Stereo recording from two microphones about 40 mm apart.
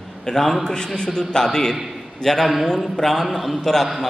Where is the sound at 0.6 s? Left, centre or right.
Centre.